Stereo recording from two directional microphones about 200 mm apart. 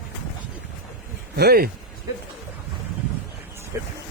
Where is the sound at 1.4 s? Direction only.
50° right (ahead or behind).